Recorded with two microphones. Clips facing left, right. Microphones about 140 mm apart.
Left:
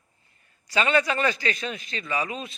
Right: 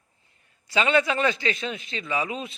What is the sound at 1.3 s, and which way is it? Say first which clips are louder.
Speech: right 1 dB; 20° right (ahead or behind).